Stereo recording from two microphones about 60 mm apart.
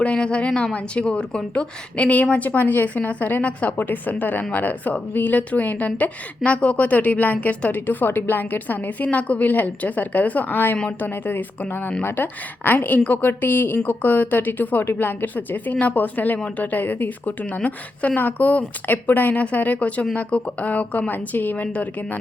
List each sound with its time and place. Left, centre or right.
0.0 s a woman's voice: centre